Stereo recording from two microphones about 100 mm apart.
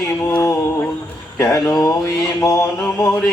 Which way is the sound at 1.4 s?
30° left (ahead or behind).